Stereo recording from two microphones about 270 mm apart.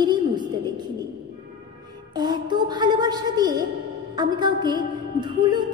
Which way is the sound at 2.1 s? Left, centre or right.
Centre.